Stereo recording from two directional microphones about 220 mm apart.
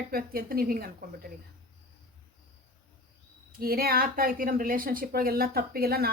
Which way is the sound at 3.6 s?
45° right (ahead or behind).